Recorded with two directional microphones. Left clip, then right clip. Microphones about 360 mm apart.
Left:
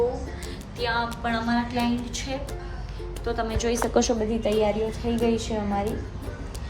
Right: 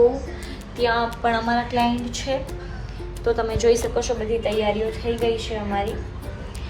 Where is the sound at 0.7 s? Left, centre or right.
Centre.